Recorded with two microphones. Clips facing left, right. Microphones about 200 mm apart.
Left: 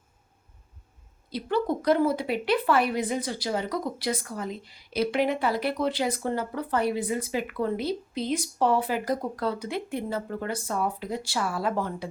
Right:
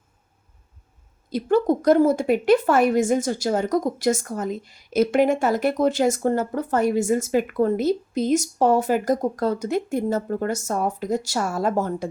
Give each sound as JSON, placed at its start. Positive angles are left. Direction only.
{"t": 1.3, "sound": "speech", "side_deg": -45}